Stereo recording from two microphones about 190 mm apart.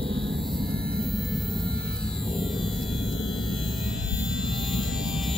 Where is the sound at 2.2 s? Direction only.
Centre (ahead or behind).